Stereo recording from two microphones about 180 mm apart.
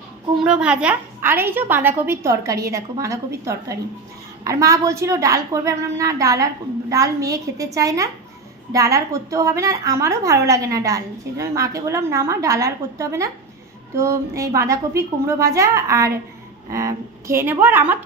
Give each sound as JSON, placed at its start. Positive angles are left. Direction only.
{"t": 0.4, "sound": "a woman's voice", "side_deg": -5}